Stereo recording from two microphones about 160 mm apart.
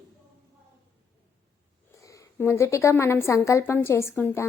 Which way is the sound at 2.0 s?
20° left (ahead or behind).